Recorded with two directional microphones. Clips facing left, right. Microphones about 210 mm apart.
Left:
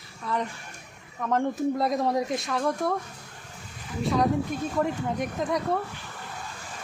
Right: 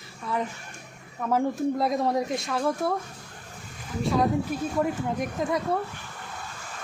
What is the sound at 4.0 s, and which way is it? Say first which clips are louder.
Speech: even; centre (ahead or behind).